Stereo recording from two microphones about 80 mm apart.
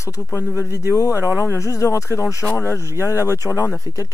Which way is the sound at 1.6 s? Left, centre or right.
Left.